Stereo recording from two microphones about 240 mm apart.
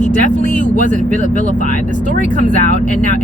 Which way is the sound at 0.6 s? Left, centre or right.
Left.